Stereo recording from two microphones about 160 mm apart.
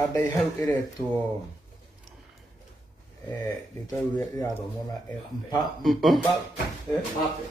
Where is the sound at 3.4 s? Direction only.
25° left (ahead or behind).